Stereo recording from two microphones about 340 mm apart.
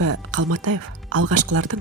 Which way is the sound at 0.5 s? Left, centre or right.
Right.